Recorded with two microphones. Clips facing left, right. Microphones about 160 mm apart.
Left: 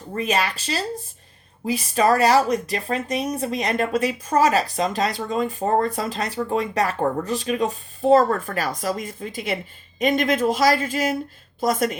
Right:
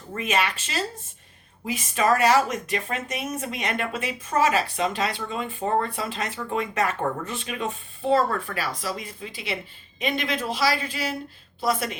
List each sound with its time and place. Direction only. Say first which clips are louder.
0.1 s speech: left 2 dB; 35° left (ahead or behind)